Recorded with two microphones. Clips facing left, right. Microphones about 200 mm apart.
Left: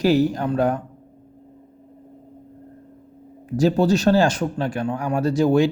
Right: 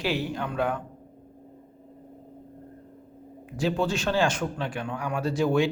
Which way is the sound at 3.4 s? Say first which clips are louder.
Left 8 dB; 40° left (ahead or behind).